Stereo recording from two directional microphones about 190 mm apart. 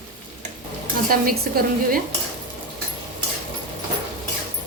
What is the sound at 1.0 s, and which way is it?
Speech, 50° right (ahead or behind).